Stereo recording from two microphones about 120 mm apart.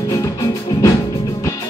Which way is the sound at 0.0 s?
30° left (ahead or behind).